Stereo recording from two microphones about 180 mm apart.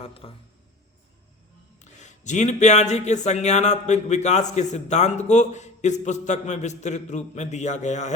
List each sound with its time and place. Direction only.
0.0 s speech: 30° left (ahead or behind)
1.8 s speech: 40° left (ahead or behind)